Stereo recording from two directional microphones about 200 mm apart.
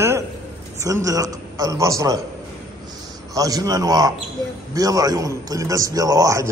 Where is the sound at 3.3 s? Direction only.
15° right (ahead or behind).